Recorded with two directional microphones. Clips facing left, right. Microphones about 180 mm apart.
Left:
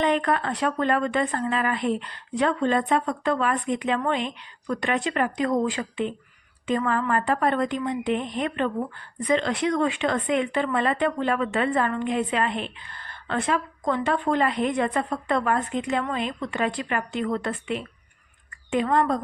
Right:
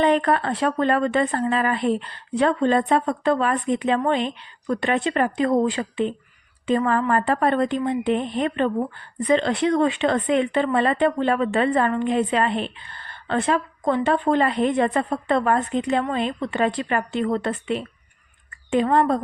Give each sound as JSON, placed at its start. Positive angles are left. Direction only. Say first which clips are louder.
{"t": 0.0, "sound": "speech", "louder": "right 4 dB", "side_deg": -35}